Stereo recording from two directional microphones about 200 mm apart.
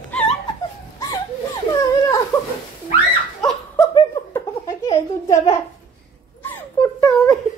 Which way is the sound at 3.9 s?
15° left (ahead or behind).